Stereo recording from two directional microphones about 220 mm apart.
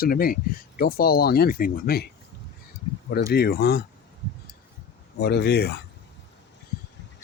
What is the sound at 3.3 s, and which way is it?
Speech, 45° left (ahead or behind).